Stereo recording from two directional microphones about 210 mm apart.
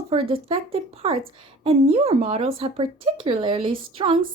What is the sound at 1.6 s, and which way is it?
A woman's voice, 25° right (ahead or behind).